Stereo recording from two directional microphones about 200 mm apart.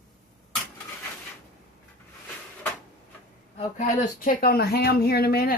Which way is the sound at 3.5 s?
40° left (ahead or behind).